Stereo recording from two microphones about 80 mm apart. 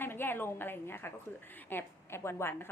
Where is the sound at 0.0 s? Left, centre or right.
Left.